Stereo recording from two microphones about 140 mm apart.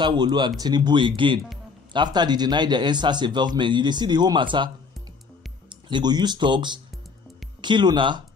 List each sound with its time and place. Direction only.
0.0 s speech: 30° right (ahead or behind)
5.9 s speech: 30° right (ahead or behind)